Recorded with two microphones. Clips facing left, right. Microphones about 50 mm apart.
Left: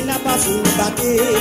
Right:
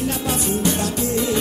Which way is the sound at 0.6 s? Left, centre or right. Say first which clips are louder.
Left 4 dB; left.